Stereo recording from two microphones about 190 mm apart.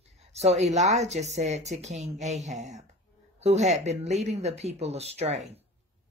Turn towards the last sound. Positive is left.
turn(degrees=-35)  # may be behind; listen again after turning